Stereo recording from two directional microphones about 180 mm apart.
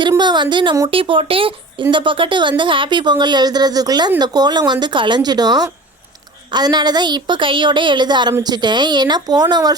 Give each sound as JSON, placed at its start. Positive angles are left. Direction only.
{"t": 0.1, "sound": "a woman's voice", "side_deg": -25}